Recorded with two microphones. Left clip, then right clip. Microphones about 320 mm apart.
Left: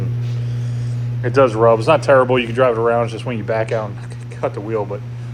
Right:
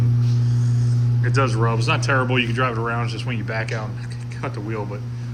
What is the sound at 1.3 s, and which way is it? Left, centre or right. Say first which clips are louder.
Speech: left 11 dB; centre.